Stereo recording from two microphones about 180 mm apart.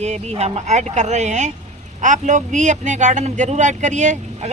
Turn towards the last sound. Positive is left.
turn(degrees=-40)  # may be behind; listen again after turning